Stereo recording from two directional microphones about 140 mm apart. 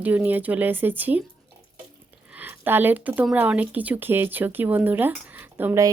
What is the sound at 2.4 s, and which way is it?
Speech, 15° right (ahead or behind).